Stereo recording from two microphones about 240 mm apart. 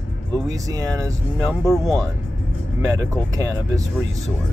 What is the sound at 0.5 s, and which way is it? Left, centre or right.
Speech, centre.